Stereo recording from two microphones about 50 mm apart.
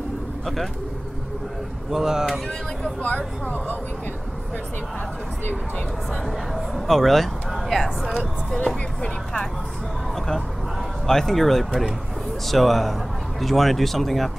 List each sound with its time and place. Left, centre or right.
1.9 s speech: centre
3.0 s speech: left
6.2 s speech: centre
9.0 s speech: centre
10.1 s a sound: centre
11.1 s speech: centre